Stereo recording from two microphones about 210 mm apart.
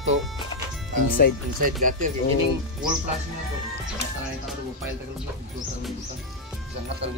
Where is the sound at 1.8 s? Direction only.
40° right (ahead or behind).